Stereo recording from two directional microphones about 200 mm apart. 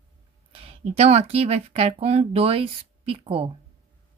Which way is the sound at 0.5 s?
30° right (ahead or behind).